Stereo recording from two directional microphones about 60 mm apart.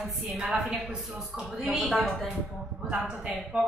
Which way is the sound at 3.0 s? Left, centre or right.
Centre.